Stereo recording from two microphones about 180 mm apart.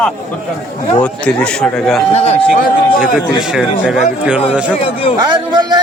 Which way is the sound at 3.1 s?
Centre (ahead or behind).